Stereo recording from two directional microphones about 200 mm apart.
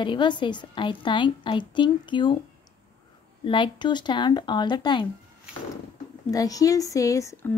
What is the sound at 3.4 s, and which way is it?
A woman's voice, 25° left (ahead or behind).